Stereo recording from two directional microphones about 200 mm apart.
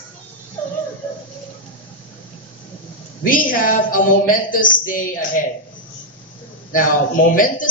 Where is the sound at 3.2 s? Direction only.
45° left (ahead or behind).